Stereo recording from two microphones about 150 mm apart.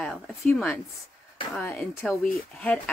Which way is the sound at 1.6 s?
15° left (ahead or behind).